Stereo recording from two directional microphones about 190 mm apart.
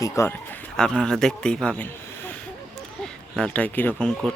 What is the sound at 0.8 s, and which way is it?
A man's voice, 5° left (ahead or behind).